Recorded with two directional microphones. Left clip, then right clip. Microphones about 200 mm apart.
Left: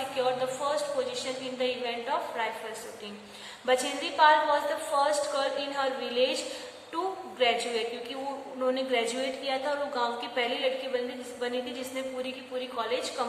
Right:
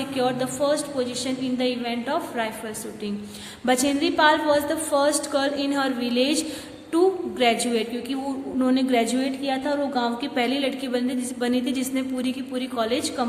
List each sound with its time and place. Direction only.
0.2 s a woman's voice: 50° right (ahead or behind)
3.7 s a woman's voice: 50° right (ahead or behind)